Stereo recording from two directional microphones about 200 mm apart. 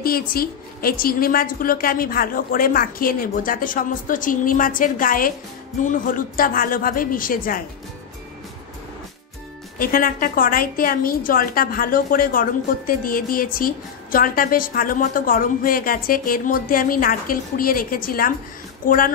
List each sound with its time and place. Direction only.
0.0 s a woman's voice: 50° left (ahead or behind)
9.8 s a woman's voice: 45° left (ahead or behind)